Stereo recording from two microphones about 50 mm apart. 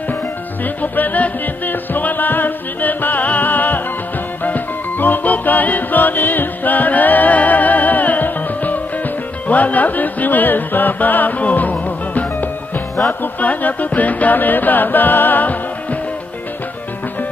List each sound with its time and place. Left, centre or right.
0.9 s music: left